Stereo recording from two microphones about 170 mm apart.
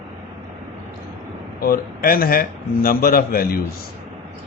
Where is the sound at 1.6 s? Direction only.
60° left (ahead or behind).